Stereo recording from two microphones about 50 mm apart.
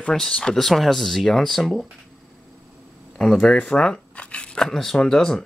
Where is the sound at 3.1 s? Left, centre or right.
Centre.